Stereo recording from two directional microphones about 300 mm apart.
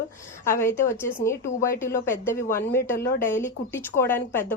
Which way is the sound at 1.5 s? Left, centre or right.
Left.